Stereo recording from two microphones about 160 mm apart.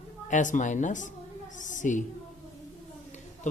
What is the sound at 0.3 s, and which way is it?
Speech, 50° left (ahead or behind).